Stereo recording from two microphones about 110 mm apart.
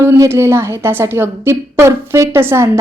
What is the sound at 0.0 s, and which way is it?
A woman's voice, 25° right (ahead or behind).